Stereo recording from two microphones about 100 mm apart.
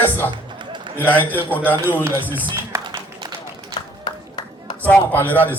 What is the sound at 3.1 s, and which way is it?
Run, 40° right (ahead or behind).